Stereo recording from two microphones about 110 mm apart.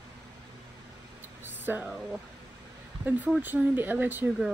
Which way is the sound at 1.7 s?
20° right (ahead or behind).